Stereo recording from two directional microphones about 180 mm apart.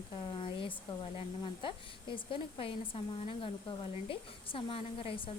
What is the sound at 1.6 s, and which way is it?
A woman's voice, 30° left (ahead or behind).